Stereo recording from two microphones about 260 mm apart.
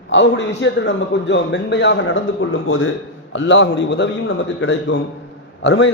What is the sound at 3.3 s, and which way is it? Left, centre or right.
Speech, left.